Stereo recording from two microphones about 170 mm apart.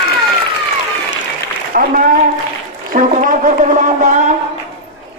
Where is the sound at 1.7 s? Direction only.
60° right (ahead or behind).